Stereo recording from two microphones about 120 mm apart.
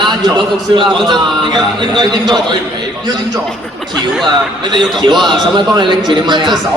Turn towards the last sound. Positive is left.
turn(degrees=-40)  # may be behind; listen again after turning